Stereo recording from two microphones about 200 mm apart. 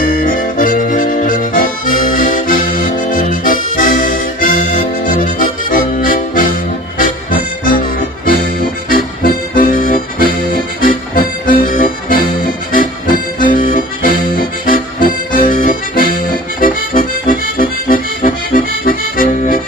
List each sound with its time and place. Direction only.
0.0 s accordion: 40° left (ahead or behind)
7.0 s music: 45° left (ahead or behind)
8.9 s accordion: 45° left (ahead or behind)
13.4 s accordion: 45° left (ahead or behind)
16.6 s music: 45° left (ahead or behind)